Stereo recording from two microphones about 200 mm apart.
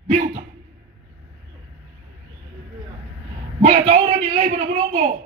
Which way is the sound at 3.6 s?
40° right (ahead or behind).